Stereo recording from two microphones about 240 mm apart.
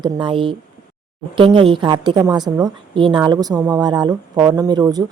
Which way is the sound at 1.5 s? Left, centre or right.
Centre.